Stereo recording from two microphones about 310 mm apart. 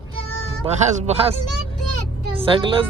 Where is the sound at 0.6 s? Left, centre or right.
Centre.